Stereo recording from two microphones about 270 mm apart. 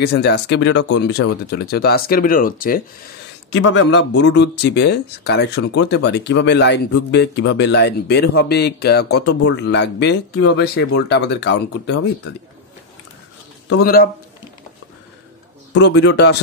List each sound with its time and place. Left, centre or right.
0.0 s speech: left
3.5 s speech: left
13.7 s speech: left
15.8 s speech: left